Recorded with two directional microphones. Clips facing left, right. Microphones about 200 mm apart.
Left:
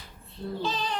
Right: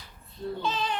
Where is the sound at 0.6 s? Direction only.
35° left (ahead or behind).